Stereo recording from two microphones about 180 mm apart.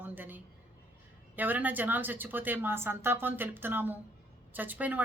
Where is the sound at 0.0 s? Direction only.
10° right (ahead or behind).